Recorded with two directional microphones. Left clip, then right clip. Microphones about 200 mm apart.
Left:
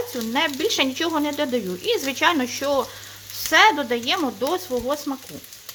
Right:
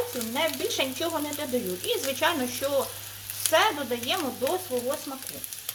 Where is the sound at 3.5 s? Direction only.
55° left (ahead or behind).